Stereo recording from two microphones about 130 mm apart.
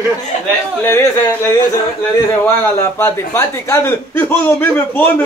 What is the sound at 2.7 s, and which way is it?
A man's voice, 20° left (ahead or behind).